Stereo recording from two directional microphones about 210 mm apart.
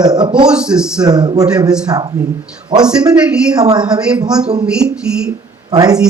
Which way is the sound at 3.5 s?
20° right (ahead or behind).